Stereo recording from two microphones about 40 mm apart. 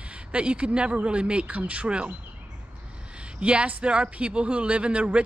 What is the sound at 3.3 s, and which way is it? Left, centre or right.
Speech, right.